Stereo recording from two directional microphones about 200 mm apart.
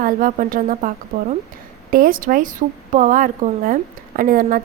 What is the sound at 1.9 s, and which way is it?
A woman's voice, 45° right (ahead or behind).